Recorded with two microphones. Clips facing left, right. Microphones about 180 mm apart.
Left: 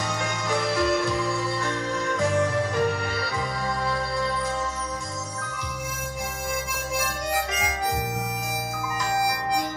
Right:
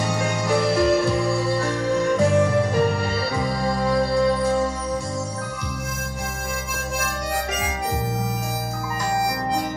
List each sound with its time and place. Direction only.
0.1 s music: 30° right (ahead or behind)